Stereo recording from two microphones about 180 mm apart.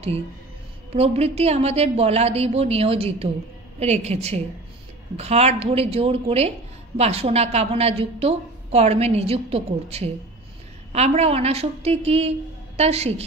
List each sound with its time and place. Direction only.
0.9 s a woman's voice: 35° right (ahead or behind)